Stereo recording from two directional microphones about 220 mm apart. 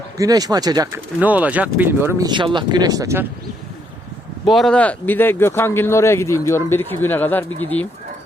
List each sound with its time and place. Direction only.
0.2 s speech: 15° right (ahead or behind)
4.5 s speech: 5° left (ahead or behind)